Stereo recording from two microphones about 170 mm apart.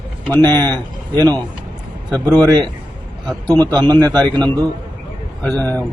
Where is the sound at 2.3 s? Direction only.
25° right (ahead or behind).